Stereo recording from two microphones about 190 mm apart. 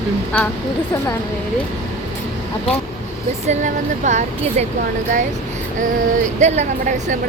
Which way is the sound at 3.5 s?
40° right (ahead or behind).